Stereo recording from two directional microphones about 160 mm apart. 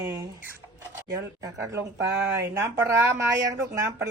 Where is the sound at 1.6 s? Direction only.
20° right (ahead or behind).